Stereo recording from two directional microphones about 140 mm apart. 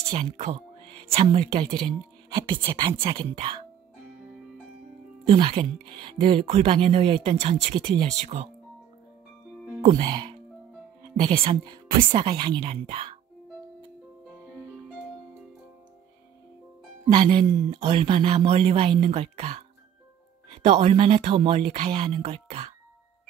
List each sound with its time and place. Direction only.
0.1 s speech: 50° right (ahead or behind)
5.2 s speech: 40° right (ahead or behind)
9.9 s speech: 30° right (ahead or behind)
11.1 s speech: 40° right (ahead or behind)
12.6 s speech: 45° right (ahead or behind)
17.1 s speech: 35° right (ahead or behind)
17.7 s speech: 45° right (ahead or behind)
20.6 s speech: 45° right (ahead or behind)
22.2 s speech: 50° right (ahead or behind)